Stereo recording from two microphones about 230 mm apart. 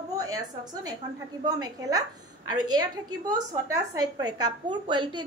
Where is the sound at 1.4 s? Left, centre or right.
Centre.